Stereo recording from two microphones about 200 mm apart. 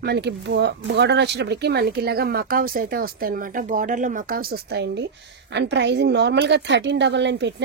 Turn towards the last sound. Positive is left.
turn(degrees=-60)  # may be behind; listen again after turning